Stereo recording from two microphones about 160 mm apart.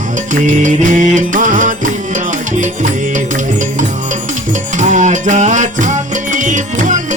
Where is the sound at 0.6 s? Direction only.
55° right (ahead or behind).